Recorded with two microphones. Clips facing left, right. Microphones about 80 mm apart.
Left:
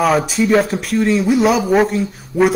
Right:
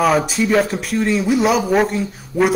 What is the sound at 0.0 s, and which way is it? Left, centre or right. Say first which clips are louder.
Speech: left 1 dB; centre.